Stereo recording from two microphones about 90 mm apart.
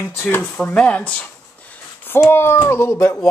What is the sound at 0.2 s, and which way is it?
Speech, 25° left (ahead or behind).